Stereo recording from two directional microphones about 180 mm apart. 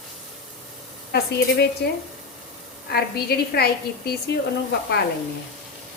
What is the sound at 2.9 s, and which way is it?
A woman's voice, 60° left (ahead or behind).